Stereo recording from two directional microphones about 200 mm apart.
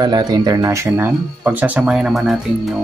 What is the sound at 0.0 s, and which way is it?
Speech, 20° right (ahead or behind).